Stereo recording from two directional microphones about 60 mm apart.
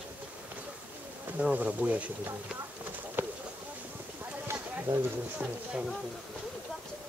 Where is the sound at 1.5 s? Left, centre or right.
Right.